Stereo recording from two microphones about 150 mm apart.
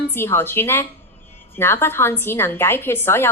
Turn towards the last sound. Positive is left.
turn(degrees=15)  # may be behind; listen again after turning